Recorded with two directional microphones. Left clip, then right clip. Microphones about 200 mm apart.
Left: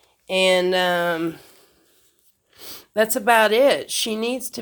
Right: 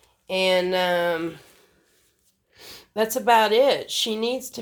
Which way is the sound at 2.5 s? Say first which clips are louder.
Left 4 dB; 40° left (ahead or behind).